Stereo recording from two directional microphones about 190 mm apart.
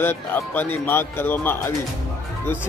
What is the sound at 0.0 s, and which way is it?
Speech, 10° left (ahead or behind).